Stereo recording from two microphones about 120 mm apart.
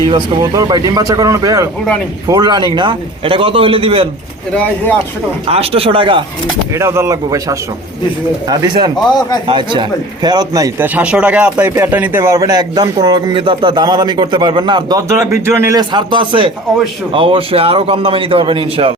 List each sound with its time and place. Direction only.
0.1 s a man's voice: 35° right (ahead or behind)
5.5 s a man's voice: 55° right (ahead or behind)
6.7 s a man's voice: 20° right (ahead or behind)
9.0 s speech: 35° left (ahead or behind)
9.5 s a man's voice: 40° right (ahead or behind)
10.8 s a man's voice: 15° right (ahead or behind)
15.8 s a man's voice: 40° right (ahead or behind)